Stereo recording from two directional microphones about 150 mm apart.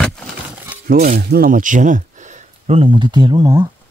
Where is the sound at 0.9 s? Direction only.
75° right (ahead or behind); by 3.6 s 25° right (ahead or behind).